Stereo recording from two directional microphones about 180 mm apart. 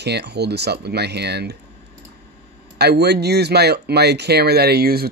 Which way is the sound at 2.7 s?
65° right (ahead or behind).